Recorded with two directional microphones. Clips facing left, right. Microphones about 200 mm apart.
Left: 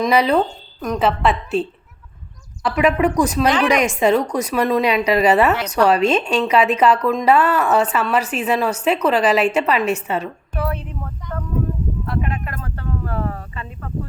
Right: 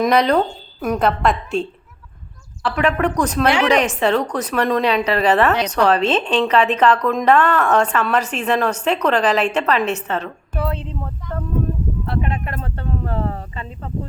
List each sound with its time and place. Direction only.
0.0 s a woman's voice: 5° left (ahead or behind)
2.6 s speech: 10° left (ahead or behind)
10.6 s speech: 25° right (ahead or behind)
12.0 s speech: 30° right (ahead or behind)